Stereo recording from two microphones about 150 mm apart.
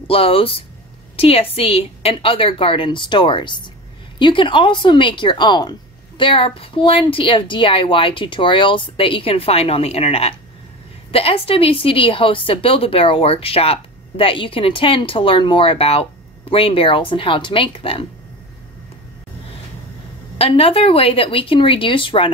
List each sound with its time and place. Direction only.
0.1 s a woman's voice: 40° left (ahead or behind)
20.3 s a woman's voice: 40° left (ahead or behind)